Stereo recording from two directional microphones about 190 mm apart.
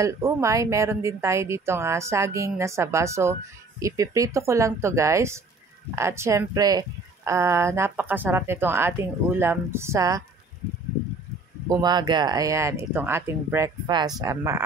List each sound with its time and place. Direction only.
0.0 s speech: 15° right (ahead or behind)
11.7 s speech: 20° right (ahead or behind)